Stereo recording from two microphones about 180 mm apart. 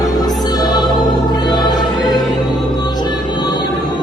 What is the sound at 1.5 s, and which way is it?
Music, 20° left (ahead or behind).